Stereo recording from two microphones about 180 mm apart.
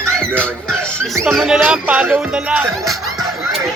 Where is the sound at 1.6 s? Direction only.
10° right (ahead or behind).